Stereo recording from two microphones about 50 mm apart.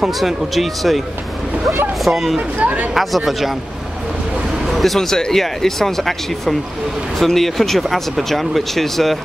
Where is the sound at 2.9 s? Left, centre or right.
Centre.